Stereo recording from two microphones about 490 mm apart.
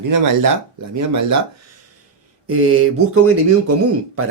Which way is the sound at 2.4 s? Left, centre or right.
Right.